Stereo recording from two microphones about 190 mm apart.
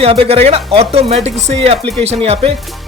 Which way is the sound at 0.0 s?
30° right (ahead or behind).